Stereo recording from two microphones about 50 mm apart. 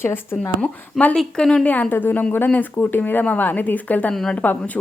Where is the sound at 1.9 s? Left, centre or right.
Left.